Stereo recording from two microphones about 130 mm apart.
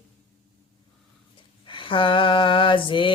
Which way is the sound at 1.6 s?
40° left (ahead or behind).